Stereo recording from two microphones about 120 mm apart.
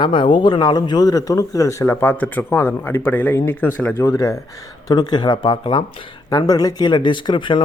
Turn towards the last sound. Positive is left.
turn(degrees=40)  # may be behind; listen again after turning